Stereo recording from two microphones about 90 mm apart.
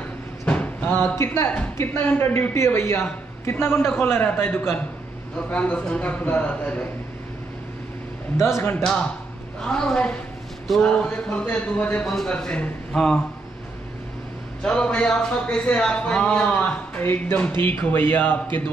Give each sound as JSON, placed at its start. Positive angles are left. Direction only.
{"t": 0.5, "sound": "a sound", "side_deg": 15}
{"t": 1.8, "sound": "a woman's voice", "side_deg": 25}
{"t": 8.4, "sound": "a man's voice", "side_deg": 30}
{"t": 9.6, "sound": "a man's voice", "side_deg": 10}
{"t": 14.6, "sound": "a man's voice", "side_deg": 15}